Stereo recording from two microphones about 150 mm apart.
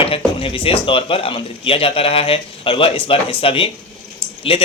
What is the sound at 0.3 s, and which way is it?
Speech, 40° left (ahead or behind).